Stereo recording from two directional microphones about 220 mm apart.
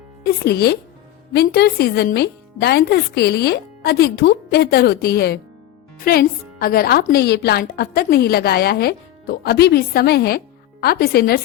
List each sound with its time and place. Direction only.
0.4 s speech: 45° left (ahead or behind)